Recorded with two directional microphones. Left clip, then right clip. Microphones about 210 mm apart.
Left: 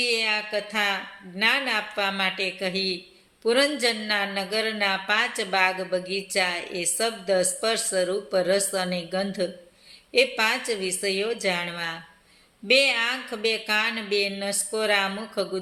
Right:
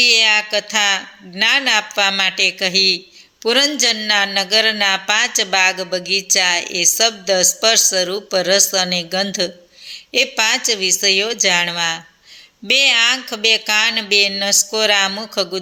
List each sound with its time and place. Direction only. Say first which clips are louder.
0.0 s a man's voice: right 12 dB; 40° right (ahead or behind)